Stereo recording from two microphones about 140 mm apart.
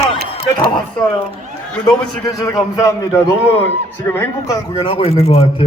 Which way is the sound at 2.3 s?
25° left (ahead or behind).